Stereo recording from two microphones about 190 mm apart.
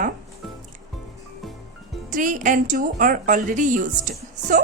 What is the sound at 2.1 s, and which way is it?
A woman's voice, 45° right (ahead or behind).